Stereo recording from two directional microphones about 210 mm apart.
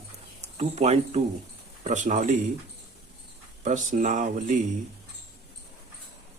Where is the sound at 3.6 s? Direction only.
35° right (ahead or behind).